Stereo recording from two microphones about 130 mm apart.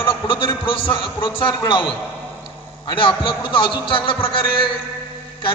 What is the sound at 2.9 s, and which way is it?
A man's voice, 40° left (ahead or behind).